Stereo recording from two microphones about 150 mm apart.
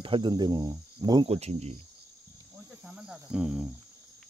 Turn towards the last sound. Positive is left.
turn(degrees=-5)  # may be behind; listen again after turning